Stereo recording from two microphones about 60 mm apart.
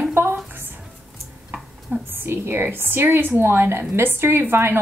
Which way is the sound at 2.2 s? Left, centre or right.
Right.